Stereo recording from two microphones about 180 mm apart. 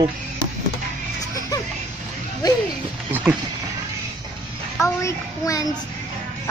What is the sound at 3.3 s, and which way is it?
Speech, 10° right (ahead or behind).